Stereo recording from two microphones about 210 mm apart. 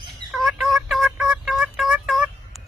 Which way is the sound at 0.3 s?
Centre (ahead or behind).